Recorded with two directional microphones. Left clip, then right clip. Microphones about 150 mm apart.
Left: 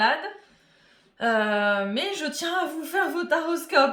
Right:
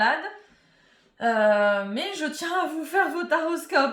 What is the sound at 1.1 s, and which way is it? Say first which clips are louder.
Speech: right 3 dB; 25° left (ahead or behind).